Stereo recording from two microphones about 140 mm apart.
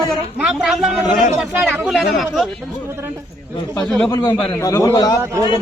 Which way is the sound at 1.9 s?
Centre (ahead or behind).